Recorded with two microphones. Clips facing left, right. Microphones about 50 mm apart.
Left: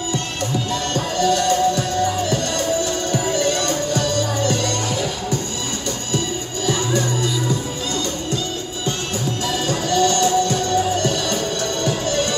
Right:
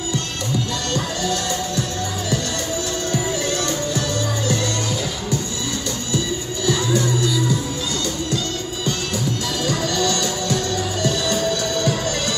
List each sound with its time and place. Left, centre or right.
0.9 s music: left
6.1 s music: left
9.7 s music: left